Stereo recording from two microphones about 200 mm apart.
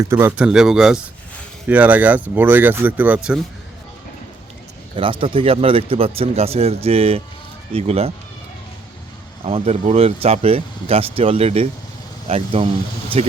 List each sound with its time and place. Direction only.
0.0 s speech: 15° right (ahead or behind)
5.2 s speech: 25° right (ahead or behind)
9.5 s speech: 30° right (ahead or behind)